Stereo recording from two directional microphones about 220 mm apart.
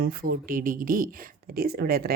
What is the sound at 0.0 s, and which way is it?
Speech, 40° right (ahead or behind).